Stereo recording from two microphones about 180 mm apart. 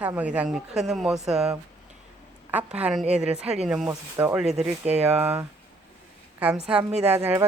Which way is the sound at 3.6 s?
5° right (ahead or behind).